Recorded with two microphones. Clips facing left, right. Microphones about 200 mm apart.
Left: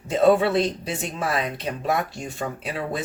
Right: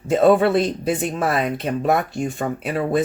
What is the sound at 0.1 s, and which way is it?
Speech, 55° right (ahead or behind).